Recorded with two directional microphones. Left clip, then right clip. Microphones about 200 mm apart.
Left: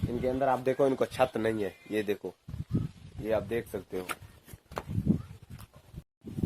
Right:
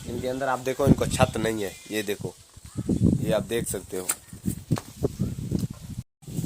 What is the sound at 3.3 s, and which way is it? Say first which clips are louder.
Speech: even; 55° right (ahead or behind).